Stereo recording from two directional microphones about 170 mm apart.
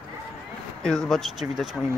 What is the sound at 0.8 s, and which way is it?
Speech, 5° left (ahead or behind).